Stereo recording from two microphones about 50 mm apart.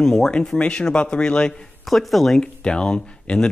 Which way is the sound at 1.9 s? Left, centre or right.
Centre.